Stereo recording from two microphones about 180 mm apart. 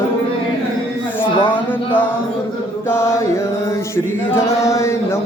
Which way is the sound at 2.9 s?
15° left (ahead or behind).